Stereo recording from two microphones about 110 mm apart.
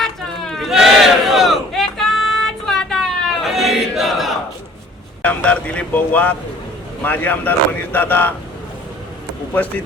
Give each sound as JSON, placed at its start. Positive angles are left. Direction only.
{"t": 0.0, "sound": "crowd", "side_deg": 5}
{"t": 5.2, "sound": "speech", "side_deg": 10}